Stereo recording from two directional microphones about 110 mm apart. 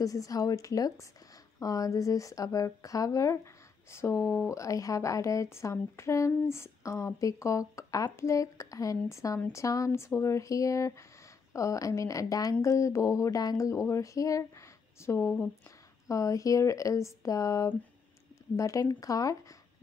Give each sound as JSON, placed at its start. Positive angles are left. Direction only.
{"t": 0.0, "sound": "speech", "side_deg": 30}
{"t": 16.1, "sound": "speech", "side_deg": 30}